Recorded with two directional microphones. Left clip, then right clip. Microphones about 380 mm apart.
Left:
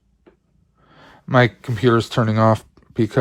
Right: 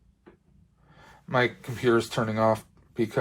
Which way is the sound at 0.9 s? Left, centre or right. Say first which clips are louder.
Left 9 dB; left.